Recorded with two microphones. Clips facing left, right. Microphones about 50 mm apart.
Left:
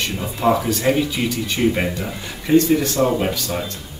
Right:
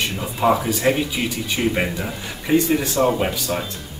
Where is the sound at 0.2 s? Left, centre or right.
Centre.